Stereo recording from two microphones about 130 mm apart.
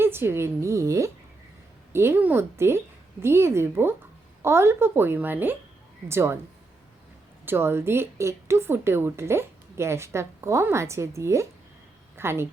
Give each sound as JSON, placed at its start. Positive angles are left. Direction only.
{"t": 0.0, "sound": "a woman's voice", "side_deg": -15}
{"t": 7.4, "sound": "a woman's voice", "side_deg": -15}